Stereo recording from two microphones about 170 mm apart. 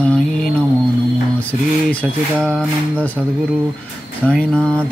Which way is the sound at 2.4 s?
5° left (ahead or behind).